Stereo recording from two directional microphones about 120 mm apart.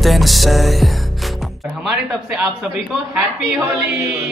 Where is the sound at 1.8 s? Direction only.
5° right (ahead or behind).